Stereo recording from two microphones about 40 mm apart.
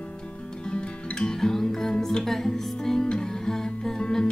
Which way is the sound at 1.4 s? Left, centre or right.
Centre.